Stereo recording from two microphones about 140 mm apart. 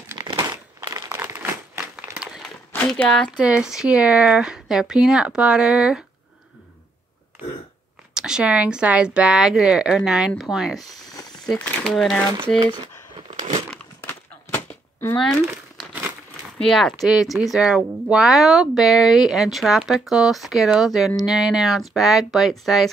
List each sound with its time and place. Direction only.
0.2 s crumpling: 30° right (ahead or behind)
2.0 s a sound: 5° right (ahead or behind)
2.9 s speech: 5° left (ahead or behind)
3.3 s speech: 10° right (ahead or behind)
8.1 s speech: 5° right (ahead or behind)
12.5 s a sound: 35° right (ahead or behind)
13.4 s crumpling: 50° right (ahead or behind)
14.0 s a sound: 15° left (ahead or behind)
16.5 s speech: 5° left (ahead or behind)